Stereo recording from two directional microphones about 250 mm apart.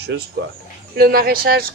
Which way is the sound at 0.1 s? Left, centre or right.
Right.